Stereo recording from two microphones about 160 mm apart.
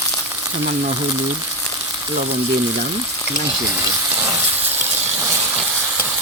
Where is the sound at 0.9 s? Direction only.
25° right (ahead or behind).